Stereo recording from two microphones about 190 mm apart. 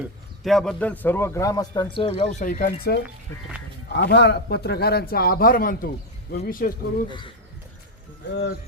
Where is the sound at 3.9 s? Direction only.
60° left (ahead or behind).